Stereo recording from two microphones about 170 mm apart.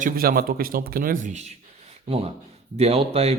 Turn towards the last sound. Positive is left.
turn(degrees=-35)  # may be behind; listen again after turning